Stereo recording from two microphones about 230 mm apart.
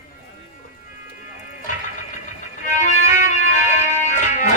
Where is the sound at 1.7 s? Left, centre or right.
Left.